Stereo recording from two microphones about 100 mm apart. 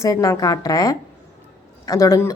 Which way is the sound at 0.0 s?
30° left (ahead or behind).